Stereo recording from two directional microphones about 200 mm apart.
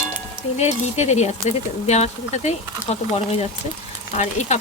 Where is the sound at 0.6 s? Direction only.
35° left (ahead or behind).